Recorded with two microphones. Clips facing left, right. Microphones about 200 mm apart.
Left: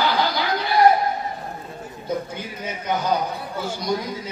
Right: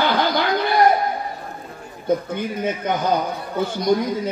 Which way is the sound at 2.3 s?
55° right (ahead or behind).